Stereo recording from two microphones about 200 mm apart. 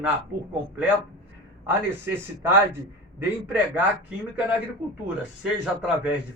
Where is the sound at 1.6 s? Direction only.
10° right (ahead or behind).